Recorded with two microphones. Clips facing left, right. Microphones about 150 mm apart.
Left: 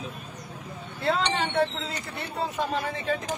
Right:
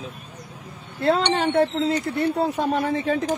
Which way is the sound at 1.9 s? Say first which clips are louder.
Right 13 dB; 55° right (ahead or behind).